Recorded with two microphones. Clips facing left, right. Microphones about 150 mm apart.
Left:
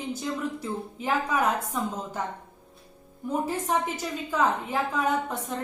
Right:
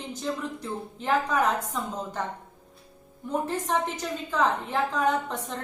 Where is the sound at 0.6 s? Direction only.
10° left (ahead or behind).